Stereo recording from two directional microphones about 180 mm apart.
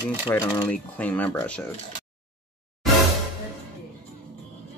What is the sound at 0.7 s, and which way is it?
Speech, 10° left (ahead or behind).